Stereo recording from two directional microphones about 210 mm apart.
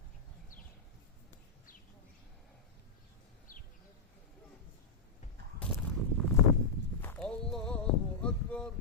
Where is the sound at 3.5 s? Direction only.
40° left (ahead or behind).